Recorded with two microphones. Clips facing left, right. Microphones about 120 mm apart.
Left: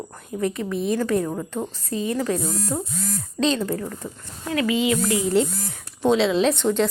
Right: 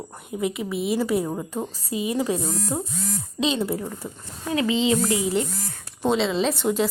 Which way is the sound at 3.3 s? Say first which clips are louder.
Left 2 dB; 10° right (ahead or behind).